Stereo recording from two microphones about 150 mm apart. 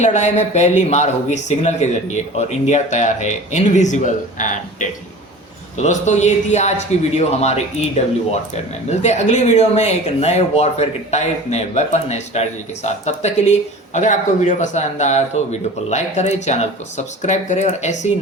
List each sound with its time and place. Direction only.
0.0 s speech: 50° left (ahead or behind)